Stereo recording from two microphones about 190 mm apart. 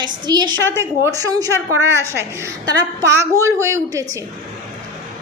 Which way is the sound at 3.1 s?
15° right (ahead or behind).